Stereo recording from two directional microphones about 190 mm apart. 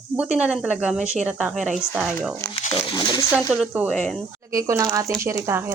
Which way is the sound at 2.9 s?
25° left (ahead or behind).